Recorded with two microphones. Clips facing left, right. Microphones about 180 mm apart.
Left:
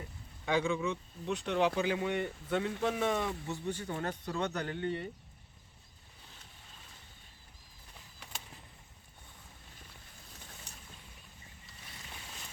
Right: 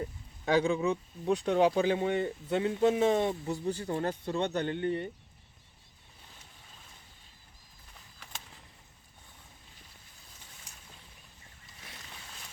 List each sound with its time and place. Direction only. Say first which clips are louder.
0.4 s speech: right 5 dB; 40° right (ahead or behind)